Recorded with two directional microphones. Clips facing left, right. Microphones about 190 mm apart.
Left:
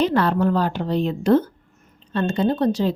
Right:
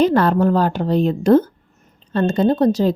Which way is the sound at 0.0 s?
45° right (ahead or behind).